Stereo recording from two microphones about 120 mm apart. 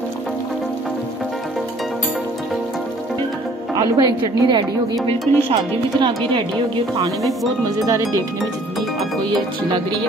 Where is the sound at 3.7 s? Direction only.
30° right (ahead or behind).